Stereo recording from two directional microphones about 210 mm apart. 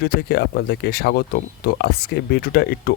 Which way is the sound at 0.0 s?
50° left (ahead or behind).